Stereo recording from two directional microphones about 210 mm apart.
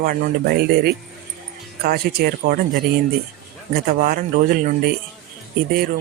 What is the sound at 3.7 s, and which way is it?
Speech, 45° right (ahead or behind).